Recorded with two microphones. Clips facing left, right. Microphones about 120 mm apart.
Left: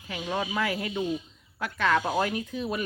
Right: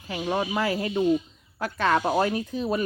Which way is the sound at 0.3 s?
30° right (ahead or behind).